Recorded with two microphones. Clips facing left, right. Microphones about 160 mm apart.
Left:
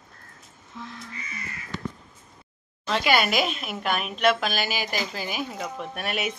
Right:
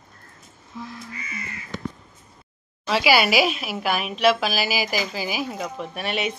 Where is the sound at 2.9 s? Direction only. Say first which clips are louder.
Right 3 dB; 5° right (ahead or behind).